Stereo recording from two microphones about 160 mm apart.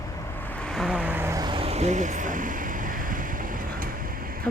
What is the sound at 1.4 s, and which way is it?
Vehicle, 30° right (ahead or behind).